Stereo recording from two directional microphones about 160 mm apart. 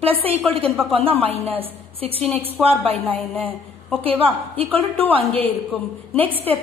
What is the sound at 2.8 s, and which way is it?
A woman's voice, 10° left (ahead or behind).